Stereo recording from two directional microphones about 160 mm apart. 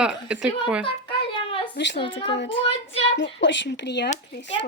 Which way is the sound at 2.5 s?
35° left (ahead or behind).